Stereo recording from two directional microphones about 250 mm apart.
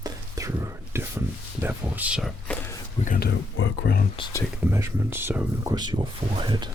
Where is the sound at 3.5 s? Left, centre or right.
Left.